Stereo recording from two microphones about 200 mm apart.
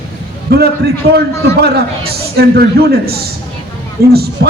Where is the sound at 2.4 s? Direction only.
55° right (ahead or behind).